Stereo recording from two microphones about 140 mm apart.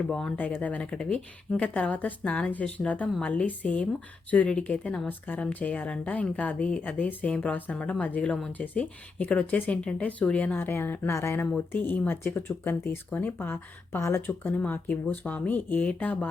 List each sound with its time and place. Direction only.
0.1 s speech: 5° left (ahead or behind)